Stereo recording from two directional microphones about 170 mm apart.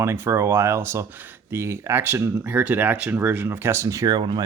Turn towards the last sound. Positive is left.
turn(degrees=-25)  # may be behind; listen again after turning